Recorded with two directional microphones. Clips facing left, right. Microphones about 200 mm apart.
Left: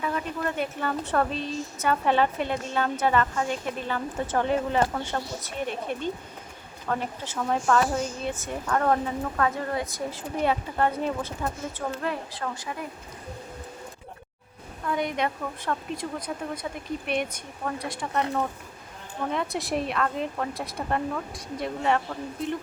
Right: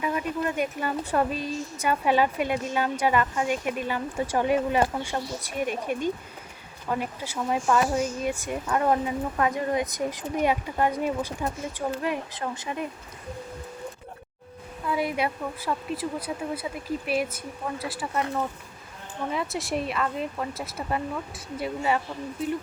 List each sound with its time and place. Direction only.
0.0 s speech: 15° right (ahead or behind)
14.8 s a woman's voice: 5° right (ahead or behind)